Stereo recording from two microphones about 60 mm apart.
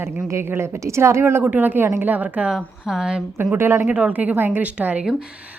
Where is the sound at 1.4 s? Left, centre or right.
Right.